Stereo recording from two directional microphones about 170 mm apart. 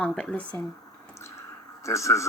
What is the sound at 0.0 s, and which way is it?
Speech, 5° left (ahead or behind).